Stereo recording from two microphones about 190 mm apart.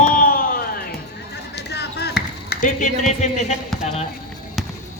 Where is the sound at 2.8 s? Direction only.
40° left (ahead or behind).